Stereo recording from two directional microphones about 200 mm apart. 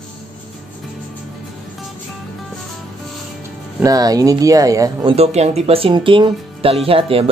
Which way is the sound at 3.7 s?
20° right (ahead or behind).